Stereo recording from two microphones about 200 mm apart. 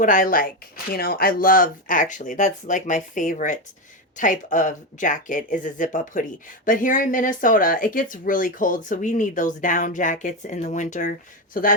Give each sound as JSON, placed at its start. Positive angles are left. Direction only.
{"t": 0.0, "sound": "speech", "side_deg": 40}